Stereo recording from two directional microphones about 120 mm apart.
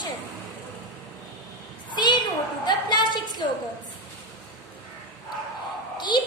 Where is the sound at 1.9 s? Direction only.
40° left (ahead or behind).